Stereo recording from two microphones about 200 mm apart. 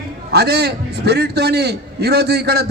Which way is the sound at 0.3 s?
55° right (ahead or behind).